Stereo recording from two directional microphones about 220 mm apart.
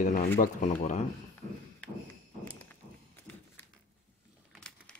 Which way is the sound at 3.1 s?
10° left (ahead or behind).